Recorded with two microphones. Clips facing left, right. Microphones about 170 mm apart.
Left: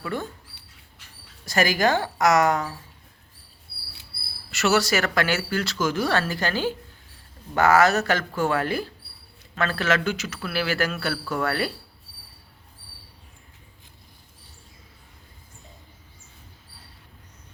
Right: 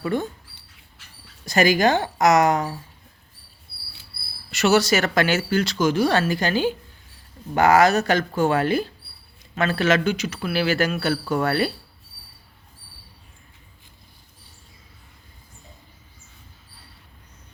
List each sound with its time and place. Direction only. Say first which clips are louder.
0.0 s speech: right 6 dB; 20° right (ahead or behind)
1.5 s speech: right 3 dB; 20° right (ahead or behind)
4.5 s speech: right 3 dB; 20° right (ahead or behind)